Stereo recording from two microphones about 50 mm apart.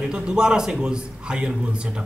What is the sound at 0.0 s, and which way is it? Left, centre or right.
Speech, centre.